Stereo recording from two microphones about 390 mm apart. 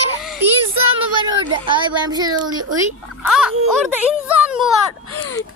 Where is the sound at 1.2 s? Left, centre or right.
Centre.